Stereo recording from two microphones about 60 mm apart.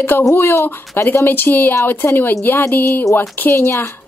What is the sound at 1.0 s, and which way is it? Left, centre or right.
A woman's voice, left.